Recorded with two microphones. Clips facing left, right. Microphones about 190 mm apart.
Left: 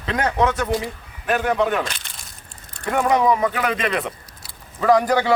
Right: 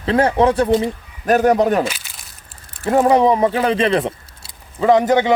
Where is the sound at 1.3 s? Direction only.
40° right (ahead or behind).